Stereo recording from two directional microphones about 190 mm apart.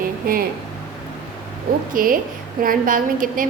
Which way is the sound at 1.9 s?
45° right (ahead or behind).